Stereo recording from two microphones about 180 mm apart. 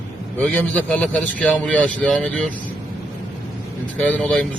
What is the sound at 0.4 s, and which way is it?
A man's voice, 10° left (ahead or behind).